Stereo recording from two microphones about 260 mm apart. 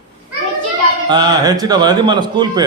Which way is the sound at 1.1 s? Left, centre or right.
Centre.